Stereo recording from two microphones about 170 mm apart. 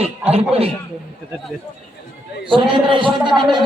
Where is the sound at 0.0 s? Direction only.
35° right (ahead or behind).